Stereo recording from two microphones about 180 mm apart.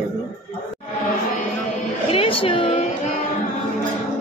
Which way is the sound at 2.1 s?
30° left (ahead or behind).